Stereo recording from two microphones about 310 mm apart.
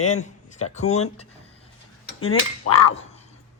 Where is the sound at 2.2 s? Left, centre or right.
Left.